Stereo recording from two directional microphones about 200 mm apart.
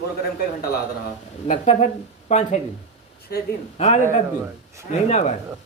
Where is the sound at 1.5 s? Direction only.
35° left (ahead or behind).